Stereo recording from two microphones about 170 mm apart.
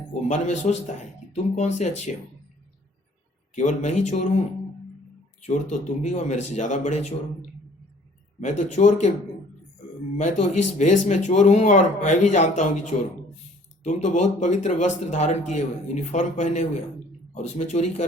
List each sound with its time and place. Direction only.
0.1 s speech: 45° left (ahead or behind)
3.5 s speech: 45° left (ahead or behind)
5.4 s speech: 45° left (ahead or behind)
8.4 s speech: 40° left (ahead or behind)
10.2 s speech: 40° left (ahead or behind)